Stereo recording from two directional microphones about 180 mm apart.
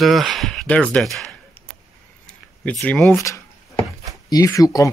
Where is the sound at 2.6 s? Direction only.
5° left (ahead or behind).